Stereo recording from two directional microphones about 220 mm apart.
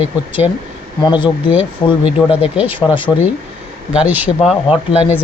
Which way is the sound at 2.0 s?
5° right (ahead or behind).